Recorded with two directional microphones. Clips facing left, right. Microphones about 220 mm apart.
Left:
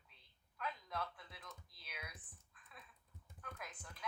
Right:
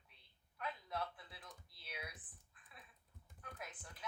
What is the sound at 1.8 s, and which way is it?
Typing, 25° right (ahead or behind).